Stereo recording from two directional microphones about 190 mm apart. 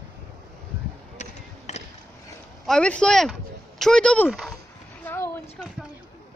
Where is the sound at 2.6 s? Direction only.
5° left (ahead or behind).